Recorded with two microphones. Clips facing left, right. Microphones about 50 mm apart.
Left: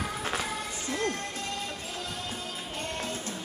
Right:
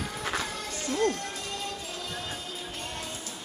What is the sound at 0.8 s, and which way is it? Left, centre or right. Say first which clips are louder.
Music: right 5 dB; left.